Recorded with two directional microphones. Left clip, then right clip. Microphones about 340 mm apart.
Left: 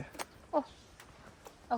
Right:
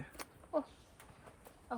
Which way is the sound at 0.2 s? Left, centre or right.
Left.